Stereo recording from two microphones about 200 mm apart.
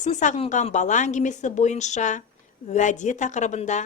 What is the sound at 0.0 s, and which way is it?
A woman's voice, 35° left (ahead or behind).